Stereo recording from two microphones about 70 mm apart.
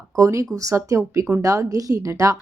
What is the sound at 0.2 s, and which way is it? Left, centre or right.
A woman's voice, right.